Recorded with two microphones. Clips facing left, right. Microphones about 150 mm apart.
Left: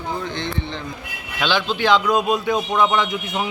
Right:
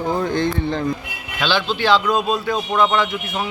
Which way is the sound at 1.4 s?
15° left (ahead or behind).